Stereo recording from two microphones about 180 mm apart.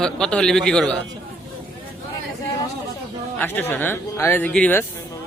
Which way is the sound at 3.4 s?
10° left (ahead or behind).